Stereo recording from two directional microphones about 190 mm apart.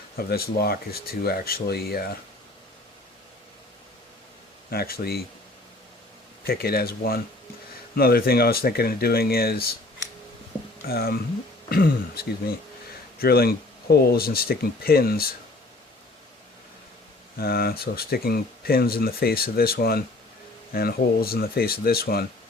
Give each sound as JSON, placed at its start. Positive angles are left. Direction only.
{"t": 0.3, "sound": "speech", "side_deg": 55}
{"t": 4.7, "sound": "speech", "side_deg": 55}
{"t": 6.4, "sound": "speech", "side_deg": 55}
{"t": 10.8, "sound": "speech", "side_deg": 55}
{"t": 17.3, "sound": "speech", "side_deg": 55}